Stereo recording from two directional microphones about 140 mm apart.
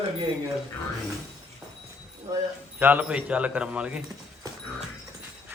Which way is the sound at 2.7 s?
15° right (ahead or behind).